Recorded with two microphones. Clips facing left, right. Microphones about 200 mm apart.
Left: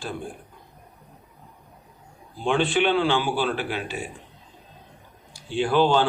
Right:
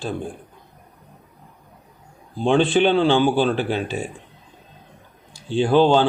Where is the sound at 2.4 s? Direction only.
25° right (ahead or behind).